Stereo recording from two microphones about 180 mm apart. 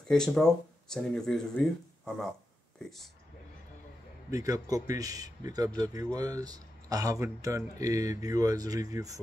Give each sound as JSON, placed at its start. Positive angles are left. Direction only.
{"t": 0.1, "sound": "speech", "side_deg": 5}
{"t": 4.3, "sound": "a man's voice", "side_deg": -20}